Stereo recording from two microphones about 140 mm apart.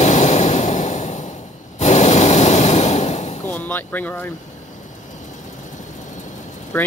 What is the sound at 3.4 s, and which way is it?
Speech, 15° left (ahead or behind).